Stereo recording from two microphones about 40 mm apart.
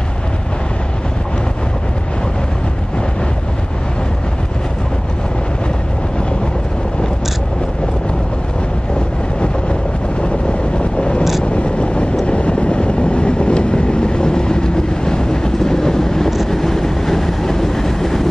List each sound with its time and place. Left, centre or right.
10.8 s vehicle: left
11.5 s a sound: left
12.3 s train: left; by 18.2 s centre